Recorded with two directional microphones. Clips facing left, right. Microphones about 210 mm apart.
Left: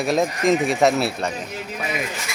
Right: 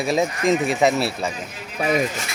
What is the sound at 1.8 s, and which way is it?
Speech, 45° right (ahead or behind).